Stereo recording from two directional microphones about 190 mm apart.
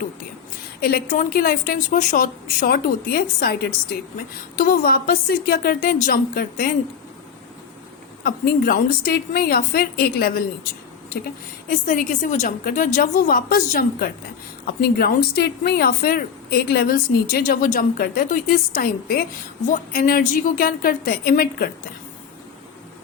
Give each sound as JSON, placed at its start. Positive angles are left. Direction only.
{"t": 0.8, "sound": "a woman's voice", "side_deg": 50}
{"t": 8.2, "sound": "a woman's voice", "side_deg": 50}
{"t": 11.7, "sound": "a woman's voice", "side_deg": 45}